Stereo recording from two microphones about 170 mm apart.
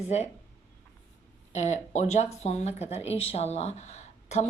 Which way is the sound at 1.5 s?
45° left (ahead or behind).